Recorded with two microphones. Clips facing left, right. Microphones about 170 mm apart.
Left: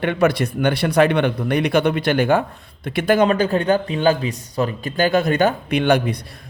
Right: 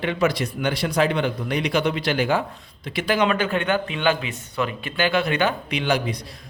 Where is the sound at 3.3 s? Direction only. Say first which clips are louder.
Left 5 dB; 35° left (ahead or behind).